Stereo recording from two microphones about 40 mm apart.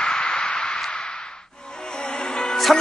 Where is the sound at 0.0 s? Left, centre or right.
Left.